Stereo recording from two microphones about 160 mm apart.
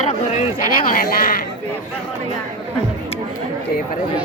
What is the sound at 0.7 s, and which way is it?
Speech, 60° left (ahead or behind).